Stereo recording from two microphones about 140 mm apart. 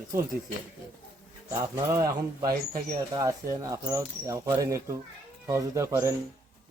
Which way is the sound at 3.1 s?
30° right (ahead or behind).